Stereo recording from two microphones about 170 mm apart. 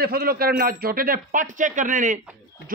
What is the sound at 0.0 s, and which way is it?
Speech, 65° right (ahead or behind).